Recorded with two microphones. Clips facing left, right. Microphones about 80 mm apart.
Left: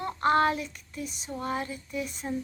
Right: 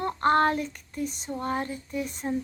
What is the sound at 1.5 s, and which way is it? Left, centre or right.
Speech, right.